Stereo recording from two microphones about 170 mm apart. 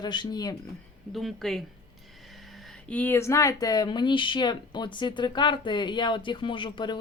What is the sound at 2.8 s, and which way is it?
Speech, 10° left (ahead or behind).